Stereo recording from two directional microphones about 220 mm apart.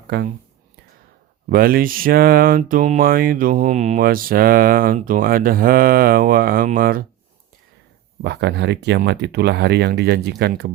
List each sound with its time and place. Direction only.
0.1 s speech: 50° right (ahead or behind)
1.5 s a sound: 40° right (ahead or behind)
8.2 s speech: 50° right (ahead or behind)